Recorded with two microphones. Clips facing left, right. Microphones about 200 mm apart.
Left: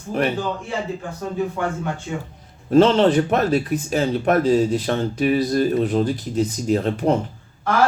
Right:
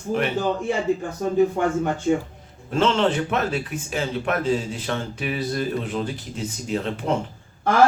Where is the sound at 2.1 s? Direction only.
40° right (ahead or behind).